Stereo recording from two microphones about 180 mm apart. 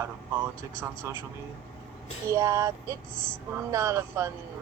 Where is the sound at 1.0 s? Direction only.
15° right (ahead or behind).